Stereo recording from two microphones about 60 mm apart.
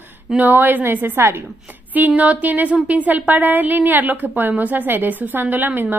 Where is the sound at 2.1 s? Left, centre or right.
Right.